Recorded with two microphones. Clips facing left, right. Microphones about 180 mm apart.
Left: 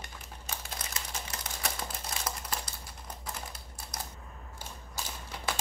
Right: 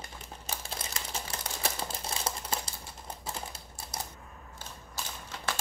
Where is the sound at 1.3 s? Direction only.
30° right (ahead or behind).